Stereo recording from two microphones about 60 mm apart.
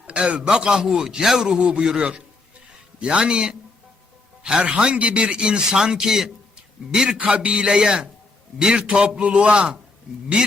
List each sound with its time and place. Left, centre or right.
0.1 s a man's voice: centre